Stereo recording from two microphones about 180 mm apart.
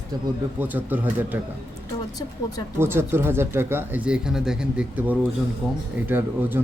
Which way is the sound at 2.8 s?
15° right (ahead or behind).